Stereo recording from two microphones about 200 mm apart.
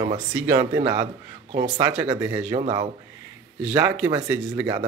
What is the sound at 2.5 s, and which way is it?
Speech, 30° right (ahead or behind).